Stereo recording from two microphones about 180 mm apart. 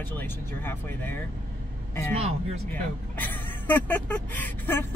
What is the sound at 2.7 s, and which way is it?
Speech, 10° left (ahead or behind).